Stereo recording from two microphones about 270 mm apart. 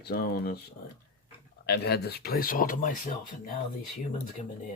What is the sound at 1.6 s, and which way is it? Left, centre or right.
Speech, left.